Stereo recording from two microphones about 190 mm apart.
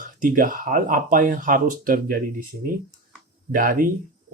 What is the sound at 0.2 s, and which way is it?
Speech, 45° right (ahead or behind).